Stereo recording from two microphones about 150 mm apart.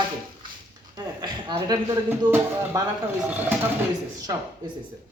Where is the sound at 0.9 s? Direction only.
25° right (ahead or behind).